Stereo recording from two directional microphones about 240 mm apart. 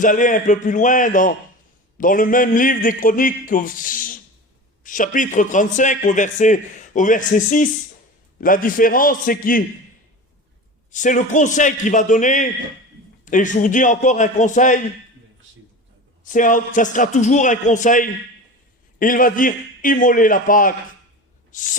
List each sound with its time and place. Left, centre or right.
0.0 s a man's voice: left
10.9 s a man's voice: left
16.2 s a man's voice: left
21.5 s a sound: left